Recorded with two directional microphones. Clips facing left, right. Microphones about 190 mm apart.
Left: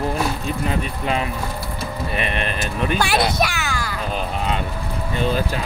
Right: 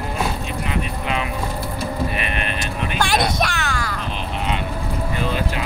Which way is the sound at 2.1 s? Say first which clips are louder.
Left 2 dB; 35° left (ahead or behind).